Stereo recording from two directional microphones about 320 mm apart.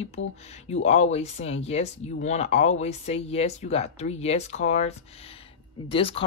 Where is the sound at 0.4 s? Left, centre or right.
Centre.